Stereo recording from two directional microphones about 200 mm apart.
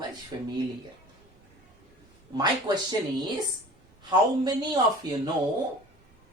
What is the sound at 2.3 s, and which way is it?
Speech, 20° right (ahead or behind).